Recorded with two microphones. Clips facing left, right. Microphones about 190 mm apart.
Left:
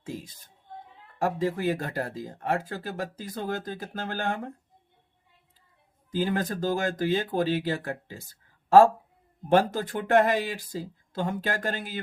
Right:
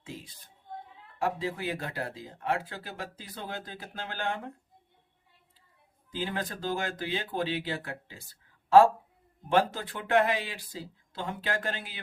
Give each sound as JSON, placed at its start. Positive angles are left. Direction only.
{"t": 0.0, "sound": "speech", "side_deg": 45}
{"t": 6.1, "sound": "speech", "side_deg": 45}